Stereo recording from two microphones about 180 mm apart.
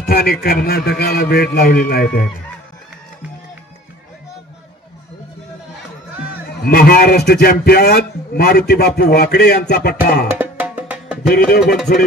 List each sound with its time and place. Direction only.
0.0 s a man's voice: 55° left (ahead or behind)
6.6 s a man's voice: 60° left (ahead or behind)
10.3 s music: 10° right (ahead or behind)
11.9 s speech: 50° left (ahead or behind)